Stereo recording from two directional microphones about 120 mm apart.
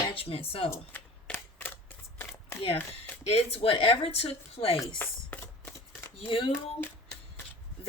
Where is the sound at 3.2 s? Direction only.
55° left (ahead or behind).